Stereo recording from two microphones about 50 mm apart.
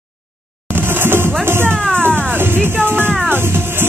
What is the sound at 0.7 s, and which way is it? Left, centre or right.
Music, right.